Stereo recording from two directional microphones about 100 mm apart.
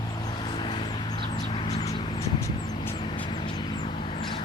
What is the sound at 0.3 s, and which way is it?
Vehicle, 50° left (ahead or behind).